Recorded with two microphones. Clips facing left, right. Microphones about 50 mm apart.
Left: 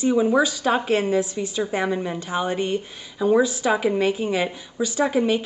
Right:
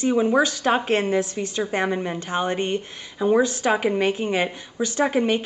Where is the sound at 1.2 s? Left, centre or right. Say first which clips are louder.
Even; right.